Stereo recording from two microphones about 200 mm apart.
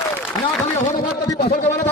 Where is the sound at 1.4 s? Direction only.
35° left (ahead or behind).